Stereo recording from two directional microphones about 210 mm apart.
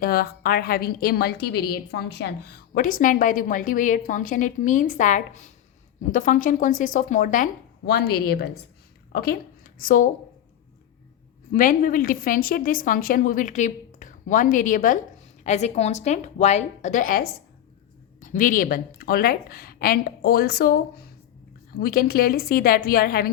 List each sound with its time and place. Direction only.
0.0 s a woman's voice: 45° left (ahead or behind)
11.5 s a woman's voice: 40° left (ahead or behind)